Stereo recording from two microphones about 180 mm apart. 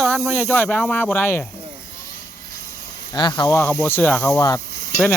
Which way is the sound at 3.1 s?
25° left (ahead or behind).